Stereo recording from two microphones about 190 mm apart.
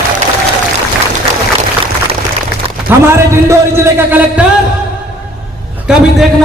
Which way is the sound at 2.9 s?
15° right (ahead or behind).